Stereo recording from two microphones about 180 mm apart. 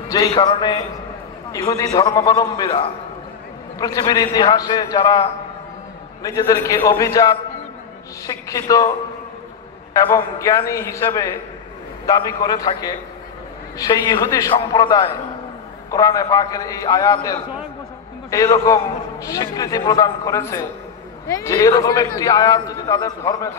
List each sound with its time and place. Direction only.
0.4 s a man's voice: 25° left (ahead or behind)
8.5 s a man's voice: 20° left (ahead or behind)
9.9 s a man's voice: 15° left (ahead or behind)